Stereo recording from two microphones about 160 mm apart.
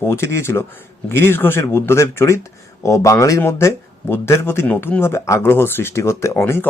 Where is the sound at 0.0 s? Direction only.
15° left (ahead or behind).